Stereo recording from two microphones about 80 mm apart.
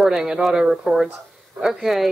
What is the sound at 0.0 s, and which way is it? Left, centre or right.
A woman's voice, centre.